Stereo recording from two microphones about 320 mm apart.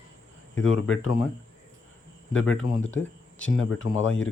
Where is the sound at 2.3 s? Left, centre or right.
Left.